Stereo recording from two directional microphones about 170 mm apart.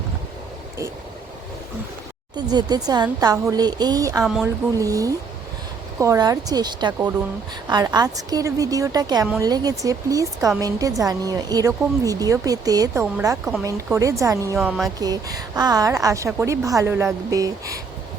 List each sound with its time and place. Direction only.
2.3 s a woman's voice: 25° right (ahead or behind)
13.3 s speech: centre (ahead or behind)
14.0 s a woman's voice: 20° right (ahead or behind)